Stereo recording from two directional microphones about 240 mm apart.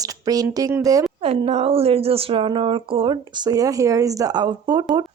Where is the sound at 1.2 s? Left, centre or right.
Right.